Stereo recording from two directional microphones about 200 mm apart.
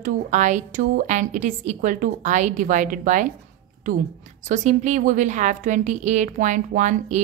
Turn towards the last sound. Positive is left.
turn(degrees=-40)  # may be behind; listen again after turning